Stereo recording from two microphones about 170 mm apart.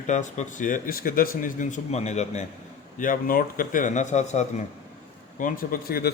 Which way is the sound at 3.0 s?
55° left (ahead or behind).